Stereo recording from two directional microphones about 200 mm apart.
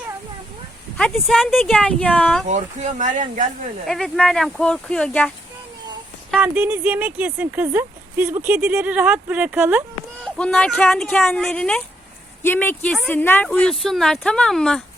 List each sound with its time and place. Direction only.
0.9 s speech: centre (ahead or behind)
2.5 s speech: 35° right (ahead or behind)
3.8 s speech: centre (ahead or behind)
6.3 s speech: 5° right (ahead or behind)
10.3 s speech: 5° left (ahead or behind)